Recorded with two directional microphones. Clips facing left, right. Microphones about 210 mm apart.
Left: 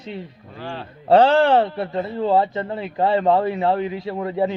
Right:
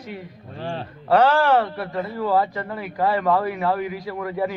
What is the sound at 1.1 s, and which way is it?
A man's voice, 25° left (ahead or behind).